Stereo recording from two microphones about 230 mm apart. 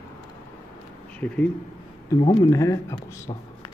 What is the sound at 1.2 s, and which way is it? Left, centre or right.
Speech, centre.